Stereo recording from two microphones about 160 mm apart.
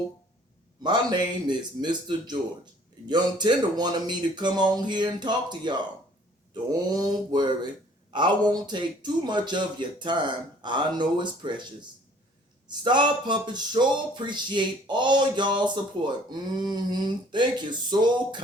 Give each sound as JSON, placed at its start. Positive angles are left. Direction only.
{"t": 0.8, "sound": "speech", "side_deg": -30}